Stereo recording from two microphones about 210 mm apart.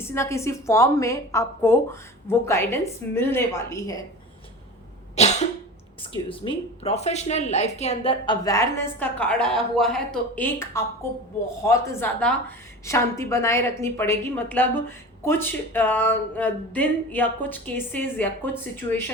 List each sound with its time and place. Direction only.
0.0 s a woman's voice: 10° left (ahead or behind)
5.1 s cough: 30° left (ahead or behind)
6.0 s a woman's voice: 25° left (ahead or behind); by 18.6 s 10° left (ahead or behind)